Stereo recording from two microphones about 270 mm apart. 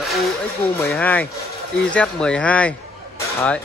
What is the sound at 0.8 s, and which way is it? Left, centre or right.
A man's voice, centre.